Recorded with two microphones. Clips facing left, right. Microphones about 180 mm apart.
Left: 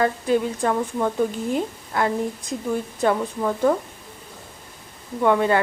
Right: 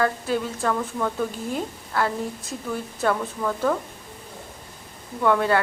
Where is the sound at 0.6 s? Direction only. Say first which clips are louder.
Left 3 dB; 20° left (ahead or behind).